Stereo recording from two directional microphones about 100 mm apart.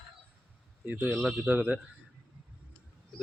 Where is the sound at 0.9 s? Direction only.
15° right (ahead or behind).